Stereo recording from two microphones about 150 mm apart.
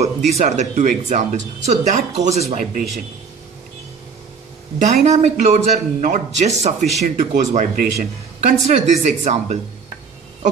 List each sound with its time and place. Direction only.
0.3 s speech: 55° right (ahead or behind)
4.7 s speech: 55° right (ahead or behind)
8.6 s speech: 55° right (ahead or behind)